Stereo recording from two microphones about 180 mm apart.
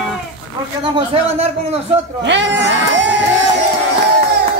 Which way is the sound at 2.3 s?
80° right.